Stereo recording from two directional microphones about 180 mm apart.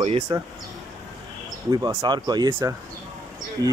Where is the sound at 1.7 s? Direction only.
20° right (ahead or behind).